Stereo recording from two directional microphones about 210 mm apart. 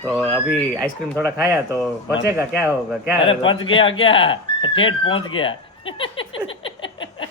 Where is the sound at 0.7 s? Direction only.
15° right (ahead or behind).